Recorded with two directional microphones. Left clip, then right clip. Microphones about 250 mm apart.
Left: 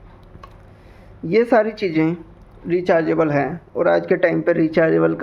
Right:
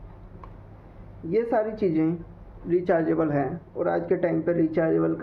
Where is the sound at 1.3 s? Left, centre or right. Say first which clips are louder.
Left 8 dB; left.